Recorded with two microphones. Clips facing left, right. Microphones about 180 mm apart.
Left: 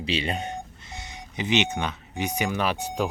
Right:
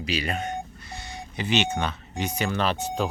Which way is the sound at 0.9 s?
20° left (ahead or behind).